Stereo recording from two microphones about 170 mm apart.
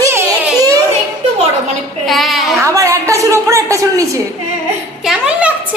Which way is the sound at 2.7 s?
15° right (ahead or behind).